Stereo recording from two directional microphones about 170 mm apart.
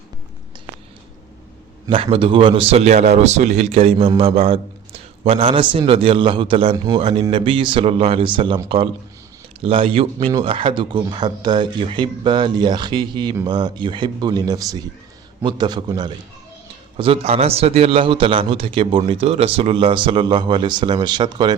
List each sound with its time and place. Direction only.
1.9 s a man's voice: 30° right (ahead or behind)
17.0 s a man's voice: 35° right (ahead or behind)